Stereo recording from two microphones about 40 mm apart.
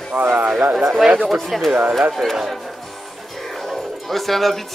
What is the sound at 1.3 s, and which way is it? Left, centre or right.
Speech, centre.